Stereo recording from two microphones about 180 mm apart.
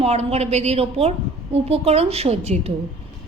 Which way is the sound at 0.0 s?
35° right (ahead or behind).